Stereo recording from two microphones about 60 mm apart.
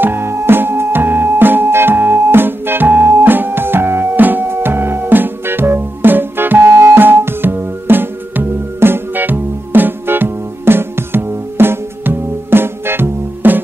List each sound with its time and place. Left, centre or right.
0.0 s music: right